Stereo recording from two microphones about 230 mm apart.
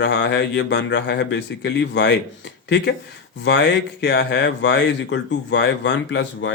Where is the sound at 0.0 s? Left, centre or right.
Left.